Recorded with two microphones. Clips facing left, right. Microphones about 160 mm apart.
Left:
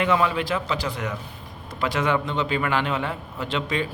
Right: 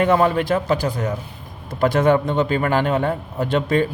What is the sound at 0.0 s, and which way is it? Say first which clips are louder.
A man's voice: right 5 dB; 45° right (ahead or behind).